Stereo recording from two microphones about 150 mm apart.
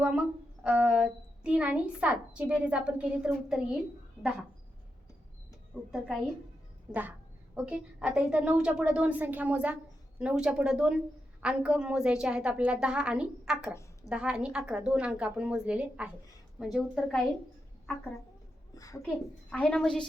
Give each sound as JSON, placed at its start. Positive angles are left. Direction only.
{"t": 0.6, "sound": "a woman's voice", "side_deg": -10}
{"t": 5.7, "sound": "a woman's voice", "side_deg": -5}
{"t": 13.7, "sound": "a sound", "side_deg": 20}
{"t": 14.1, "sound": "a woman's voice", "side_deg": -5}
{"t": 18.7, "sound": "a sound", "side_deg": 25}
{"t": 19.0, "sound": "a woman's voice", "side_deg": 5}